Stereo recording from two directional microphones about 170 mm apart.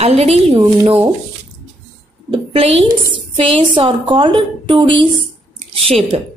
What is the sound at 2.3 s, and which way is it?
A woman's voice, 35° right (ahead or behind).